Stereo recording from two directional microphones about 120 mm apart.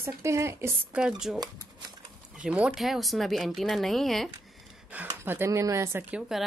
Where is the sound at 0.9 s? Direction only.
5° right (ahead or behind).